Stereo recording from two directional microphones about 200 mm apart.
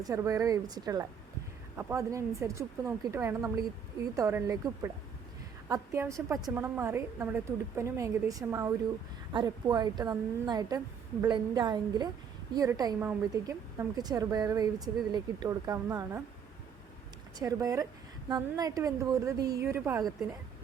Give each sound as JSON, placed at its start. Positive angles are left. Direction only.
{"t": 0.0, "sound": "a woman's voice", "side_deg": -15}
{"t": 17.4, "sound": "a woman's voice", "side_deg": -15}